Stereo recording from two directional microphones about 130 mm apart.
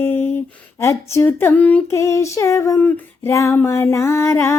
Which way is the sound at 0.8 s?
20° left (ahead or behind).